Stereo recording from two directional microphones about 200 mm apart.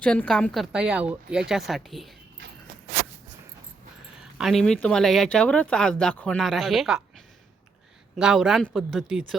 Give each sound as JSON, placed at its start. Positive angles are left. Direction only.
{"t": 0.0, "sound": "speech", "side_deg": 5}
{"t": 4.2, "sound": "speech", "side_deg": 0}
{"t": 8.1, "sound": "speech", "side_deg": 0}